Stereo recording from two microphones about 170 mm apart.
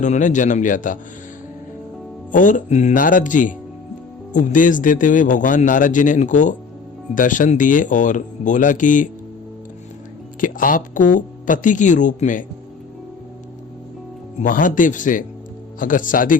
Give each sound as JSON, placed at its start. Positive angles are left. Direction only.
{"t": 0.0, "sound": "a man's voice", "side_deg": 45}
{"t": 2.3, "sound": "a man's voice", "side_deg": 50}
{"t": 10.4, "sound": "a man's voice", "side_deg": 55}
{"t": 14.4, "sound": "a man's voice", "side_deg": 50}